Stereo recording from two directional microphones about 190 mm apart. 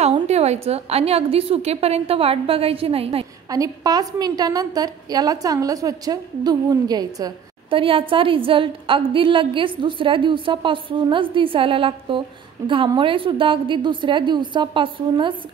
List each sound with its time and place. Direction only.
0.0 s a woman's voice: 35° right (ahead or behind)
3.4 s a woman's voice: 20° right (ahead or behind)